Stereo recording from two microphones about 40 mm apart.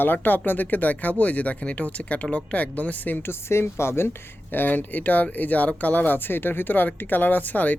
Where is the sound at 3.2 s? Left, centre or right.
Left.